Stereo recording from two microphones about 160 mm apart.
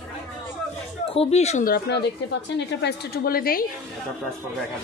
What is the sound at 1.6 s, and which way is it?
A woman's voice, 85° left.